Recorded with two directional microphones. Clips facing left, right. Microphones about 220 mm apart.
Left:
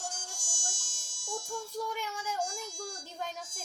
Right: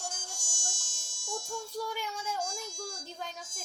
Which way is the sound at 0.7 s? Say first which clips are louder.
Even; 40° right (ahead or behind).